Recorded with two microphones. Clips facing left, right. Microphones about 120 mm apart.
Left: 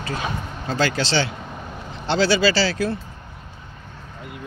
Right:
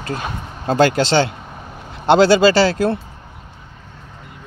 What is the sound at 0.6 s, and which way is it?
Speech, 50° right (ahead or behind).